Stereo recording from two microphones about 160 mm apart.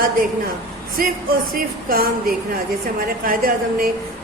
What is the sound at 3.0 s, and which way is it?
Speech, 65° right (ahead or behind).